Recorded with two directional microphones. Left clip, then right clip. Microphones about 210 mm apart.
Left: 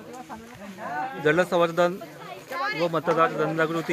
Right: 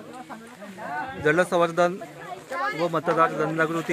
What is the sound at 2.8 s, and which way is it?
Speech, 5° right (ahead or behind).